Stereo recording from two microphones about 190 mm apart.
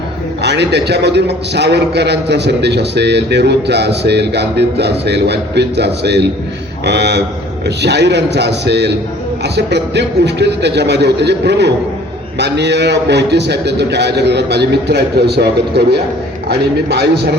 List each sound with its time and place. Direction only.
0.4 s a man's voice: 60° right (ahead or behind)